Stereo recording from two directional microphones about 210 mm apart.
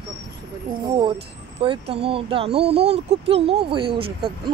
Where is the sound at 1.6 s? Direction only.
25° right (ahead or behind).